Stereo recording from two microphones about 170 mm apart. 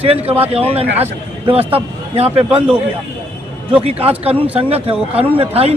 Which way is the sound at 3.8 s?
35° right (ahead or behind).